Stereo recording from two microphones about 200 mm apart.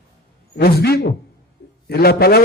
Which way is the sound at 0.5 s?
50° left (ahead or behind).